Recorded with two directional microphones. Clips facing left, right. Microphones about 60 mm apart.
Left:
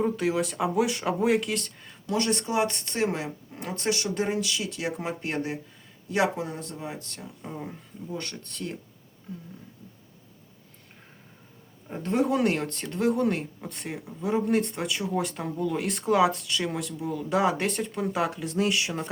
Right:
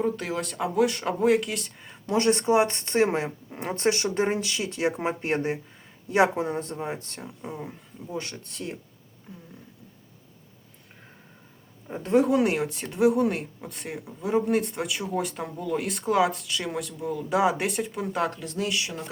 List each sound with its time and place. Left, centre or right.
0.0 s speech: centre
1.8 s speech: right
7.4 s speech: centre
8.1 s speech: centre
12.1 s speech: centre
18.3 s speech: left